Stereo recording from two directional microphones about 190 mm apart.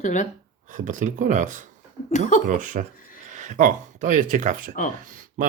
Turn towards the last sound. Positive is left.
turn(degrees=-45)  # may be behind; listen again after turning